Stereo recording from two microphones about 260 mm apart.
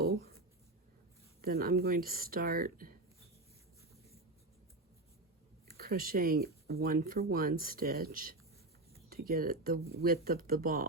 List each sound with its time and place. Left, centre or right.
0.0 s writing: right
1.4 s speech: right
5.7 s speech: right